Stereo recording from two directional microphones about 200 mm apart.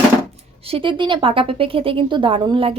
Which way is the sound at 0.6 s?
25° right (ahead or behind).